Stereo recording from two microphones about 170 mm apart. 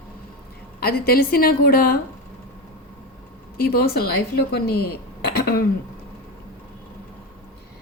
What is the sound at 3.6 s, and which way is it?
A woman's voice, 65° left (ahead or behind).